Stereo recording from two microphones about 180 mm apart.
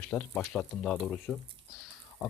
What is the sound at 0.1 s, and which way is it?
Speech, 5° left (ahead or behind).